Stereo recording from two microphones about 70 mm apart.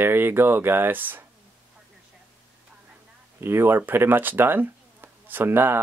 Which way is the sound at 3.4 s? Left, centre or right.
Right.